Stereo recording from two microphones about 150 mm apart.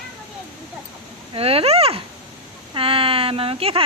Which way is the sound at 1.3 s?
40° right (ahead or behind).